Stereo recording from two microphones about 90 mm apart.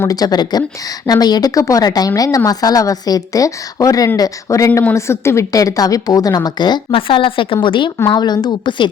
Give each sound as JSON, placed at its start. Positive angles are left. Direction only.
{"t": 0.1, "sound": "a woman's voice", "side_deg": 45}
{"t": 6.9, "sound": "speech", "side_deg": 75}
{"t": 8.1, "sound": "a woman's voice", "side_deg": 50}